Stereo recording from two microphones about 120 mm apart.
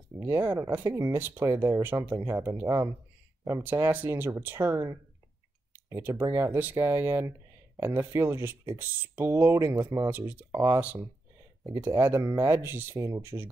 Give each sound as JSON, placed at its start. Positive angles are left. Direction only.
{"t": 0.2, "sound": "speech", "side_deg": -25}
{"t": 5.9, "sound": "speech", "side_deg": -25}
{"t": 11.7, "sound": "speech", "side_deg": -25}